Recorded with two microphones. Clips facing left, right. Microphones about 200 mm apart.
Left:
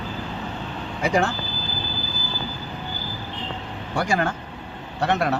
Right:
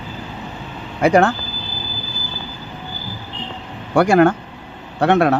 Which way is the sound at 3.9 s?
60° right (ahead or behind).